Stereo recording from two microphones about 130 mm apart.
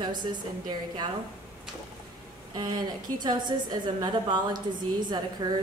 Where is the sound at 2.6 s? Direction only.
30° right (ahead or behind).